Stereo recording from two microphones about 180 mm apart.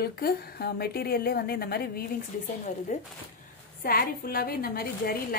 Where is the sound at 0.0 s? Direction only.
55° left (ahead or behind).